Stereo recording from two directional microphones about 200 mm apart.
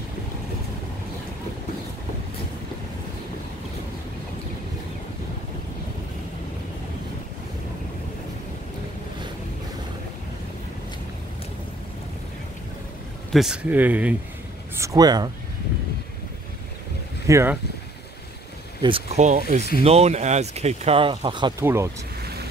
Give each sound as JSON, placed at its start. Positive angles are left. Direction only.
{"t": 13.3, "sound": "speech", "side_deg": -5}
{"t": 17.3, "sound": "speech", "side_deg": -15}
{"t": 18.8, "sound": "speech", "side_deg": -25}